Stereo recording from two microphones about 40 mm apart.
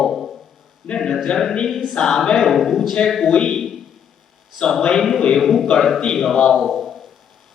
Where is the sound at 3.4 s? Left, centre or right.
Centre.